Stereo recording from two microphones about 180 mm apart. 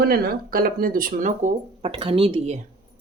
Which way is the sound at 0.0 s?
55° right (ahead or behind).